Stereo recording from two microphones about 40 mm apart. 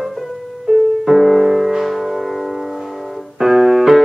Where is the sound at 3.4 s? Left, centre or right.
Centre.